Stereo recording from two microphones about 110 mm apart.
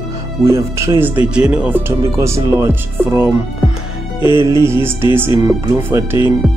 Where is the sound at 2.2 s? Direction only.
25° right (ahead or behind).